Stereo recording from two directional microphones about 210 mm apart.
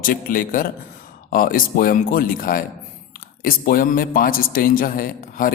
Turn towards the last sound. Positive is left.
turn(degrees=40)  # may be behind; listen again after turning